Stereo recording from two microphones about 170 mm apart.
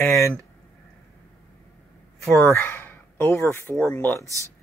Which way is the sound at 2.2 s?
15° left (ahead or behind).